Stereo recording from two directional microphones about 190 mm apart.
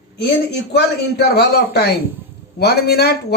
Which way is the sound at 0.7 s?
60° left (ahead or behind).